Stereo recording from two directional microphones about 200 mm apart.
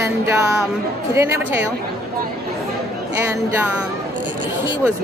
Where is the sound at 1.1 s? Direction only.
15° right (ahead or behind).